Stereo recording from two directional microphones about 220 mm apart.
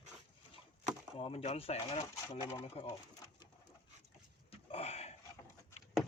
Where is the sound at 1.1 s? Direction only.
25° left (ahead or behind).